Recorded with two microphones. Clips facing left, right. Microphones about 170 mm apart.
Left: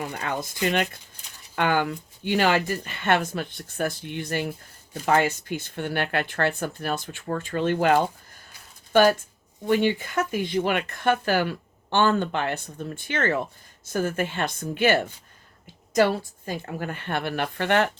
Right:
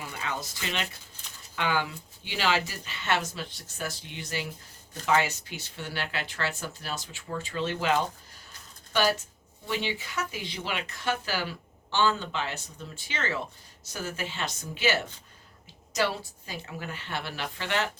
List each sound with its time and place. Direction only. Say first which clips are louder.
0.0 s a woman's voice: left 6 dB; 50° left (ahead or behind)